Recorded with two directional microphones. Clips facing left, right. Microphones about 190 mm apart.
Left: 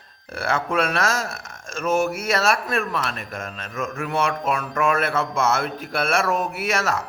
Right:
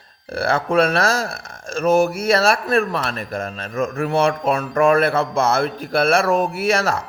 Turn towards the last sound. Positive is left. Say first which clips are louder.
# right 5 dB
turn(degrees=-30)  # may be behind; listen again after turning